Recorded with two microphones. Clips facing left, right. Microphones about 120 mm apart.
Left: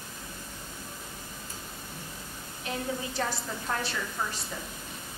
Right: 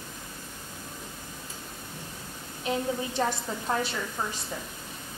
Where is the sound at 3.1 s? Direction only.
20° right (ahead or behind).